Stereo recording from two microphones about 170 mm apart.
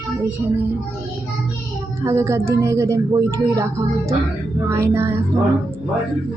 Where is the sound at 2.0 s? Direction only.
15° right (ahead or behind).